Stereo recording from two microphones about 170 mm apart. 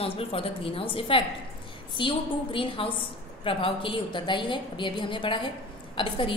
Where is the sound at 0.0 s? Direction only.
35° left (ahead or behind).